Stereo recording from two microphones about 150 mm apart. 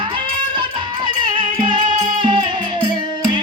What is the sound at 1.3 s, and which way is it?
Music, 30° right (ahead or behind).